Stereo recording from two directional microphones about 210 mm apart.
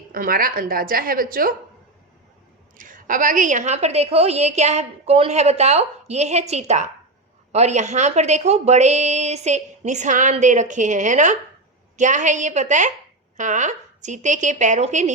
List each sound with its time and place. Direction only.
0.1 s a woman's voice: 45° right (ahead or behind)
2.7 s a woman's voice: 40° right (ahead or behind)